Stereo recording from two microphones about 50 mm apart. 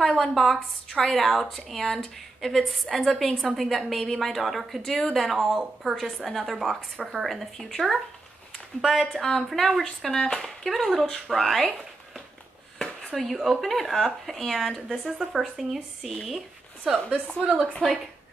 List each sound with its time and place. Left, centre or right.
0.0 s a woman's voice: centre
12.7 s speech: centre
17.1 s a woman's voice: right